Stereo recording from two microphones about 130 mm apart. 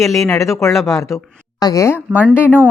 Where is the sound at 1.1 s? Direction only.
25° left (ahead or behind).